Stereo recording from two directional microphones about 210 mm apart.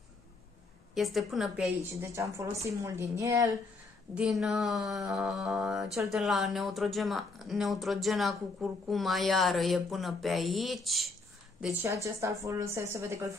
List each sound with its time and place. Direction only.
0.9 s mantra: centre (ahead or behind)
2.0 s a woman's voice: 15° right (ahead or behind)
4.1 s mantra: 5° right (ahead or behind)
11.6 s a woman's voice: 10° right (ahead or behind)